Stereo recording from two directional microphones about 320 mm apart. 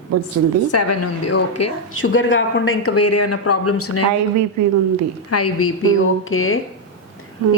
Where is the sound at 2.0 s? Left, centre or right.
Left.